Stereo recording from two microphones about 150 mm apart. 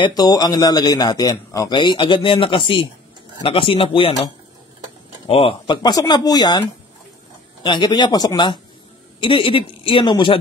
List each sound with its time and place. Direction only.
0.0 s speech: 25° left (ahead or behind)
5.3 s speech: 40° left (ahead or behind)
7.6 s speech: 30° left (ahead or behind)